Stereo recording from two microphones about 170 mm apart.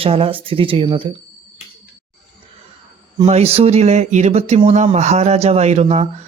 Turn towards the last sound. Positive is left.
turn(degrees=-40)  # may be behind; listen again after turning